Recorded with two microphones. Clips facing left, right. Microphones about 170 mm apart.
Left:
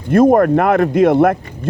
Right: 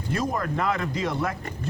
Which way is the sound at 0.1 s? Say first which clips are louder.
Left 18 dB; 55° left (ahead or behind).